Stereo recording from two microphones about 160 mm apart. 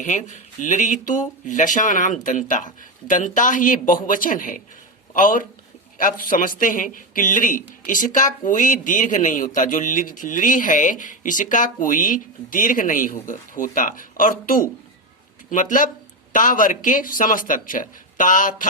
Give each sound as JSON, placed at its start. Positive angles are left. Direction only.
{"t": 0.0, "sound": "speech", "side_deg": 50}